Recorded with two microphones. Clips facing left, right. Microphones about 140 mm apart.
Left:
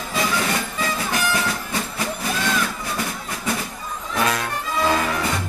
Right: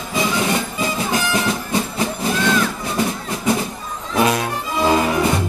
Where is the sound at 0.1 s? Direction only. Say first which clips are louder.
Right 4 dB; 20° right (ahead or behind).